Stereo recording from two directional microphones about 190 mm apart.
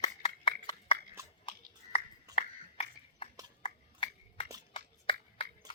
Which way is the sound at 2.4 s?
30° left (ahead or behind).